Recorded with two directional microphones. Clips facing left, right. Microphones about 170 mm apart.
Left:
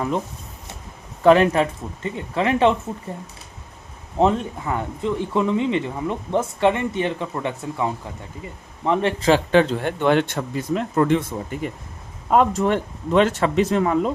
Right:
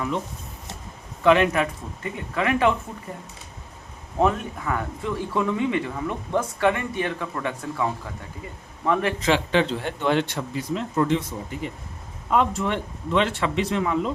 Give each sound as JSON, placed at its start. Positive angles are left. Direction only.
{"t": 1.2, "sound": "speech", "side_deg": 35}
{"t": 4.2, "sound": "speech", "side_deg": 25}
{"t": 9.3, "sound": "speech", "side_deg": 50}
{"t": 12.3, "sound": "speech", "side_deg": 45}